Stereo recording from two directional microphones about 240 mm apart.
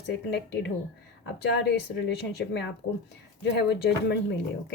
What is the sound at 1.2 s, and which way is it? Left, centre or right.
A woman's voice, left.